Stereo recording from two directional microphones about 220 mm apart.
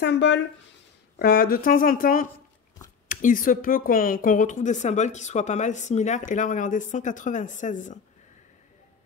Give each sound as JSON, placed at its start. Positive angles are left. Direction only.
{"t": 0.0, "sound": "speech", "side_deg": 50}